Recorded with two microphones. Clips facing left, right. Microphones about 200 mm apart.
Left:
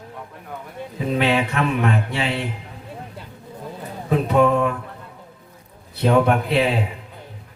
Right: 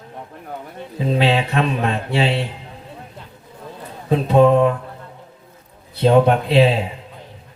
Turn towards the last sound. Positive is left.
turn(degrees=-30)  # may be behind; listen again after turning